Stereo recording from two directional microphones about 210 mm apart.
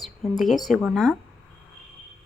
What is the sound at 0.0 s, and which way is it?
Speech, centre (ahead or behind).